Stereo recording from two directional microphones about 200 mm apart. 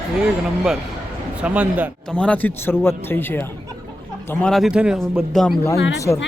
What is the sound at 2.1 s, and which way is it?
Speech, 5° left (ahead or behind).